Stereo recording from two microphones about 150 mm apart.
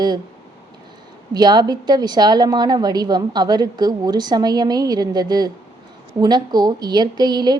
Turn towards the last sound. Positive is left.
turn(degrees=-30)  # may be behind; listen again after turning